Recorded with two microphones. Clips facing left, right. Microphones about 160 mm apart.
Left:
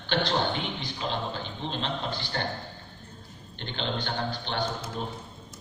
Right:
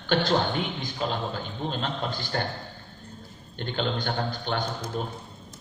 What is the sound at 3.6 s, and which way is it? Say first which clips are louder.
A man's voice: right 4 dB; 45° right (ahead or behind).